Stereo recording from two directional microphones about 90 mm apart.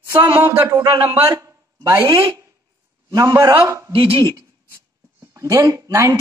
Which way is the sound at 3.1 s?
40° right (ahead or behind).